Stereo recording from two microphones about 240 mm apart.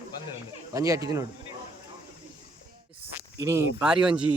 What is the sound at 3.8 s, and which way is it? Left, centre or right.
Speech, centre.